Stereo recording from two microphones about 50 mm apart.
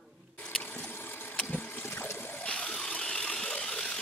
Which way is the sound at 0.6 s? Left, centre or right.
Left.